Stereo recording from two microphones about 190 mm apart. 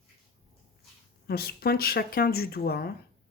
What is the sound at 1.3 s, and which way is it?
Speech, 55° left (ahead or behind).